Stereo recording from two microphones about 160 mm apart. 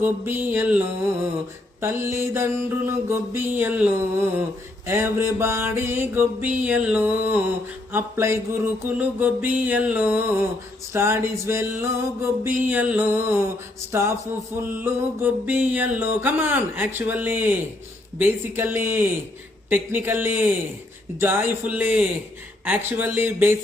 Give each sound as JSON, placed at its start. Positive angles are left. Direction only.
{"t": 0.0, "sound": "music", "side_deg": -15}
{"t": 1.8, "sound": "music", "side_deg": -15}